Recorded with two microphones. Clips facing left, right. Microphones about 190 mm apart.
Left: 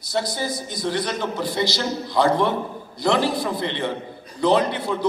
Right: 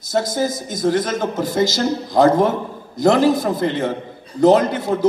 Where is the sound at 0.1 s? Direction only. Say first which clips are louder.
Right 5 dB; 45° right (ahead or behind).